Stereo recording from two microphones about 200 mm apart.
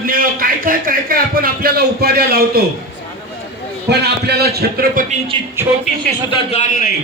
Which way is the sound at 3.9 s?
55° right (ahead or behind).